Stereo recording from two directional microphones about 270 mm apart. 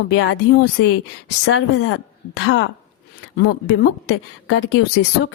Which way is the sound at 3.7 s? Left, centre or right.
Left.